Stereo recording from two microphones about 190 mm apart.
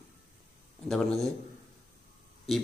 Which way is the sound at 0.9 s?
5° left (ahead or behind).